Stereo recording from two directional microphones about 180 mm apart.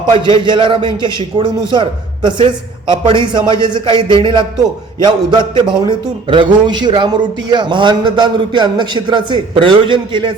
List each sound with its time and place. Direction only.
0.1 s a man's voice: 25° right (ahead or behind)